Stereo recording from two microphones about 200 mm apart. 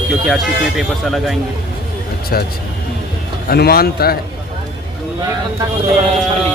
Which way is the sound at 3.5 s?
50° left (ahead or behind).